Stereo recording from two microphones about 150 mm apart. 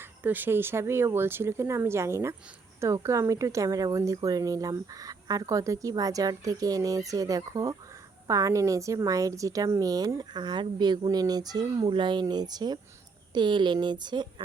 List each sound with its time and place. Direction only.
0.0 s a woman's voice: 10° right (ahead or behind); by 14.4 s 30° right (ahead or behind)